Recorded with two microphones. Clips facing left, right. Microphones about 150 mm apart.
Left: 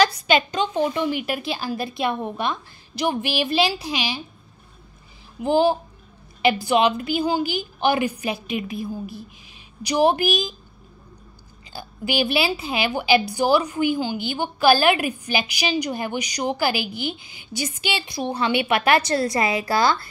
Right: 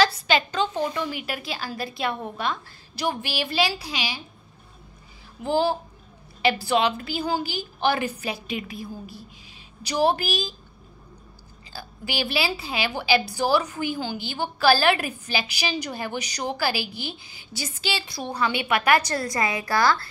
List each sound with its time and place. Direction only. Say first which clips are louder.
0.0 s a woman's voice: left 2 dB; 15° left (ahead or behind)
5.4 s a woman's voice: left 4 dB; 20° left (ahead or behind)
11.7 s a woman's voice: left 6 dB; 20° left (ahead or behind)